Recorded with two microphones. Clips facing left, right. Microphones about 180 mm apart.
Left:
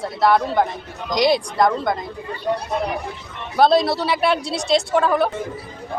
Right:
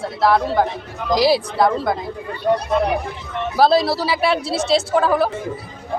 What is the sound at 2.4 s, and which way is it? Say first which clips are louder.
Speech: right 5 dB; 60° right (ahead or behind).